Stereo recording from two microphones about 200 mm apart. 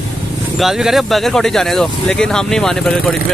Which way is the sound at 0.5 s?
Centre (ahead or behind).